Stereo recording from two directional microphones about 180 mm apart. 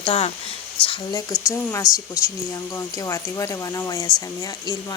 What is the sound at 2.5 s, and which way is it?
Speech, 15° left (ahead or behind).